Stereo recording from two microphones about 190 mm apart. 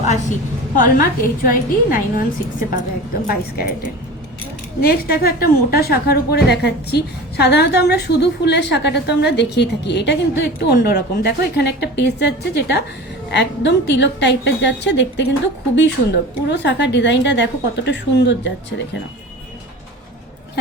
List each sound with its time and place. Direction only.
0.8 s a woman's voice: 50° left (ahead or behind)
4.8 s a woman's voice: 55° left (ahead or behind)